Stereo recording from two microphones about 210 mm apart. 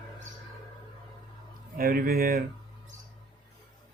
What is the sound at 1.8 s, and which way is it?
Speech, 45° right (ahead or behind).